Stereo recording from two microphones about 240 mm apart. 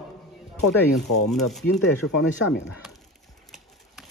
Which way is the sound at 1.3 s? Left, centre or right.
Centre.